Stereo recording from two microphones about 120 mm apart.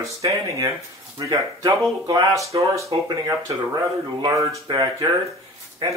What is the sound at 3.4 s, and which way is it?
Speech, 30° right (ahead or behind).